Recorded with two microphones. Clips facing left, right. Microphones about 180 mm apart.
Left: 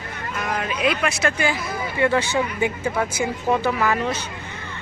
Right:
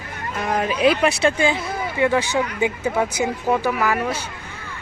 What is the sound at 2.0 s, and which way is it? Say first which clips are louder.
Speech: even; 15° right (ahead or behind).